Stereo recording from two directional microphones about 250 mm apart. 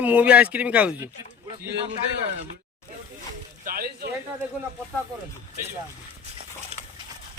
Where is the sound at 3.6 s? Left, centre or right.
Right.